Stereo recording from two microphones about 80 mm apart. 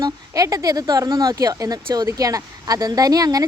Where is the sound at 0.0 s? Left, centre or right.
Right.